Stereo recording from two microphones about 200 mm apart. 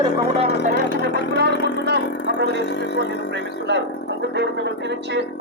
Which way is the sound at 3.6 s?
60° right (ahead or behind).